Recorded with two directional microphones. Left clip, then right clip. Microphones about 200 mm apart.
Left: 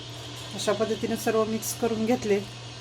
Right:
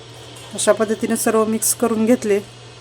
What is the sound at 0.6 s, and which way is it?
Speech, 55° right (ahead or behind).